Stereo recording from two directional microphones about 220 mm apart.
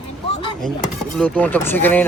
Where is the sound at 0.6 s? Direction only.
5° left (ahead or behind).